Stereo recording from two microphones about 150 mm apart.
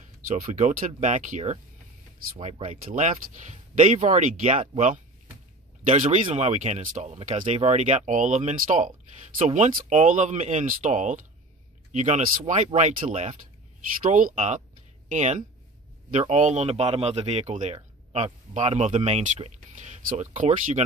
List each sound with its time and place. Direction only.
0.4 s speech: 50° right (ahead or behind)
6.2 s speech: 45° right (ahead or behind)
14.0 s speech: 60° right (ahead or behind)